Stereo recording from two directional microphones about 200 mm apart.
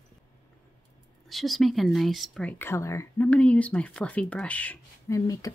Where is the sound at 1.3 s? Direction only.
Centre (ahead or behind).